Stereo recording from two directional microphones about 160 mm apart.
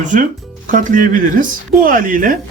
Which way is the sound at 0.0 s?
55° right (ahead or behind).